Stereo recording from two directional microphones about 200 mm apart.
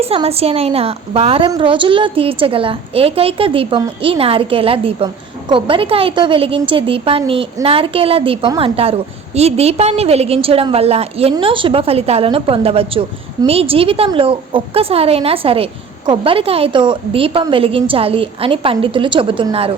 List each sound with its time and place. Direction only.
0.0 s a woman's voice: 30° right (ahead or behind)